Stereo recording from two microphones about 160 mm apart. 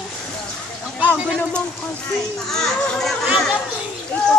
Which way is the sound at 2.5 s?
5° left (ahead or behind).